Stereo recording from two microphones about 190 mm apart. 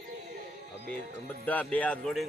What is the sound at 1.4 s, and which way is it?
Speech, 10° left (ahead or behind).